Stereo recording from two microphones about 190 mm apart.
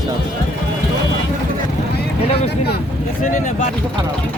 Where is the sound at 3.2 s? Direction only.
40° left (ahead or behind).